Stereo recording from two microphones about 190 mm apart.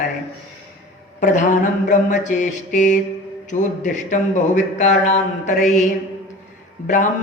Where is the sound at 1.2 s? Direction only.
40° left (ahead or behind).